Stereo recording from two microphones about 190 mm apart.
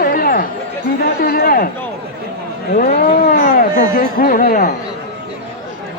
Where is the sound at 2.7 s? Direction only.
50° left (ahead or behind).